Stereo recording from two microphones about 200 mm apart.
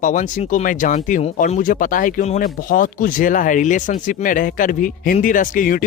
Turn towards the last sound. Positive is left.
turn(degrees=45)  # may be behind; listen again after turning